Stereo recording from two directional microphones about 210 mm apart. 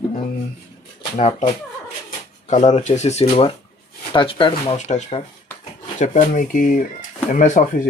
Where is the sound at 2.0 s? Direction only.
35° left (ahead or behind).